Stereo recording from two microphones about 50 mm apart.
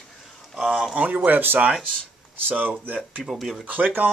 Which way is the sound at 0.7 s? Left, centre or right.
Centre.